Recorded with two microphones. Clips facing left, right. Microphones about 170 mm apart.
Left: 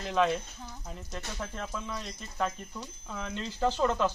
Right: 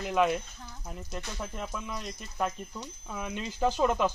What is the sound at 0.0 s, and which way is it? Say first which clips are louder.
Speech: right 1 dB; 10° right (ahead or behind).